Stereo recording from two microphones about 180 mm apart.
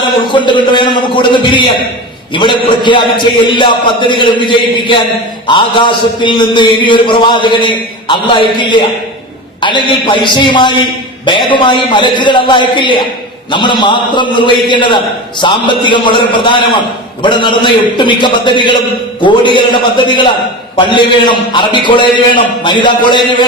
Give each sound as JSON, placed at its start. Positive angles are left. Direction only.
{"t": 0.3, "sound": "a man's voice", "side_deg": 25}